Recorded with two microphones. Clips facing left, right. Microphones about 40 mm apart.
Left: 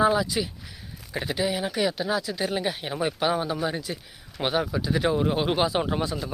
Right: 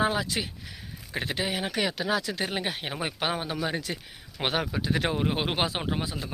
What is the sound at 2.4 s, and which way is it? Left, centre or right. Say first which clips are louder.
Speech: left 3 dB; right.